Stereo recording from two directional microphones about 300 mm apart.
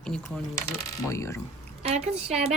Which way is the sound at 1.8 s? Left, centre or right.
Right.